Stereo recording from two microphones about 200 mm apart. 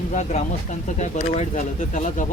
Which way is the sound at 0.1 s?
35° left (ahead or behind).